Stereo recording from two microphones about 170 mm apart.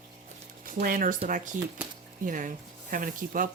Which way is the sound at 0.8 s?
55° right (ahead or behind).